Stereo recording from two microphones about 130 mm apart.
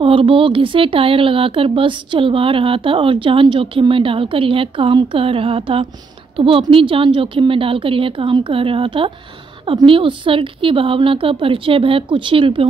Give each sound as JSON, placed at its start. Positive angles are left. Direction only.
{"t": 0.0, "sound": "a woman's voice", "side_deg": -40}